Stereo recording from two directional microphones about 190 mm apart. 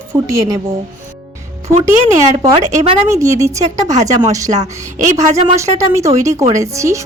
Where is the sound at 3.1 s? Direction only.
15° right (ahead or behind).